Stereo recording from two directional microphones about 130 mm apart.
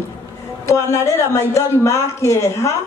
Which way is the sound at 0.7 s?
25° left (ahead or behind).